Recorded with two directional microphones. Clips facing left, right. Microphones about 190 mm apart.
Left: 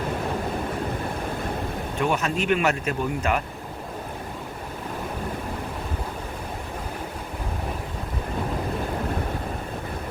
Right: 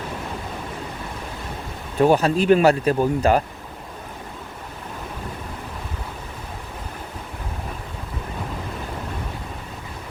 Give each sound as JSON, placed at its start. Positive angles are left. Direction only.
{"t": 2.0, "sound": "speech", "side_deg": -35}